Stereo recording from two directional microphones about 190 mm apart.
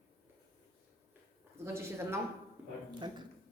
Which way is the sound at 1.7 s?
15° right (ahead or behind).